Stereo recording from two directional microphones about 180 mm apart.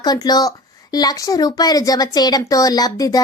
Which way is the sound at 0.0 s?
20° left (ahead or behind).